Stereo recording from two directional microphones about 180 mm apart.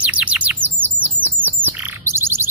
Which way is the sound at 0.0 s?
10° right (ahead or behind).